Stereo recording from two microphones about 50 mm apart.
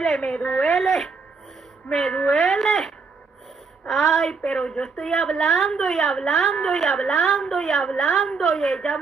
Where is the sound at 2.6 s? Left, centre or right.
Centre.